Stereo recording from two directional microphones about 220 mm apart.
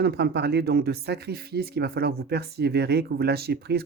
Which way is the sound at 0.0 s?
45° right (ahead or behind).